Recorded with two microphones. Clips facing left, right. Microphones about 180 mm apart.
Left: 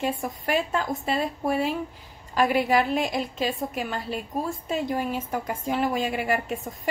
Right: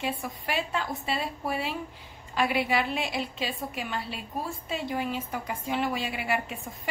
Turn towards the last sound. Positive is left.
turn(degrees=45)  # may be behind; listen again after turning